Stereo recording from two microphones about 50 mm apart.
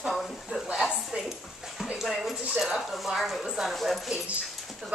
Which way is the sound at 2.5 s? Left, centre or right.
Centre.